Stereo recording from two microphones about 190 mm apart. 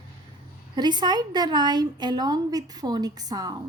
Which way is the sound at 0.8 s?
20° right (ahead or behind).